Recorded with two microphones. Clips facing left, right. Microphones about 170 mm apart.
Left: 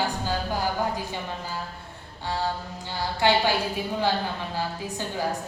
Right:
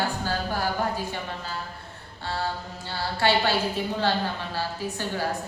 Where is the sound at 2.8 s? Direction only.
15° left (ahead or behind).